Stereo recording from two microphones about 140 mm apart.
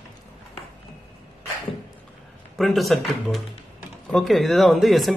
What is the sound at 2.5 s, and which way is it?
Speech, centre (ahead or behind).